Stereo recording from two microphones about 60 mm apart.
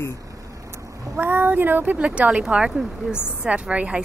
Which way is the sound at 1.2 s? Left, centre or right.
Right.